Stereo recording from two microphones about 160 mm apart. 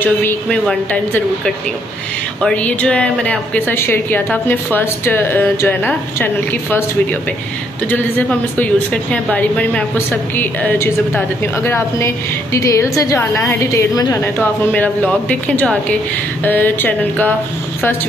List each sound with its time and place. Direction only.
0.0 s a woman's voice: 10° left (ahead or behind)
7.9 s a woman's voice: 10° left (ahead or behind)